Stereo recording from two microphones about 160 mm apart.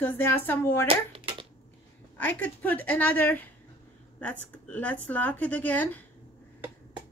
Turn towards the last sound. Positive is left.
turn(degrees=10)  # may be behind; listen again after turning